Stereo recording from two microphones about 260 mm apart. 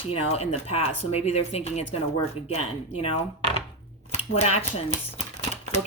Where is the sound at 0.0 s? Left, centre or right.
Left.